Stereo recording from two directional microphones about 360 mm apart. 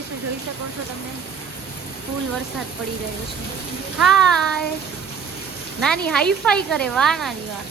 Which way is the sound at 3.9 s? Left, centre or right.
Centre.